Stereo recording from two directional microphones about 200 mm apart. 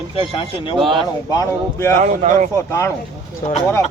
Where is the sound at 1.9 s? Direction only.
40° right (ahead or behind).